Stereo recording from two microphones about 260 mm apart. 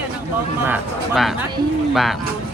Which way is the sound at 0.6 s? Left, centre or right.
Centre.